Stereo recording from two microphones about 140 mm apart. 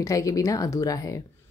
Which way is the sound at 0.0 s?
25° left (ahead or behind).